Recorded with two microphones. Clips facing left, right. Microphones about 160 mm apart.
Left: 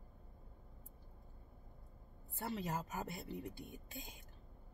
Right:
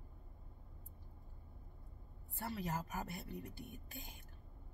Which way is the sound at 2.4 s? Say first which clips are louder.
Left 1 dB; 20° left (ahead or behind).